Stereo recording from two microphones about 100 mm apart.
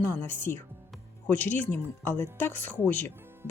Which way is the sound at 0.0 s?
20° left (ahead or behind).